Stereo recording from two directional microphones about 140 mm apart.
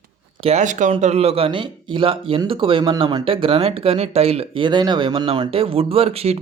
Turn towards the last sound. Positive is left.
turn(degrees=-45)  # may be behind; listen again after turning